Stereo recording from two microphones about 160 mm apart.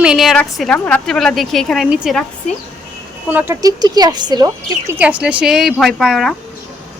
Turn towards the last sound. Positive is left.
turn(degrees=0)  # may be behind; listen again after turning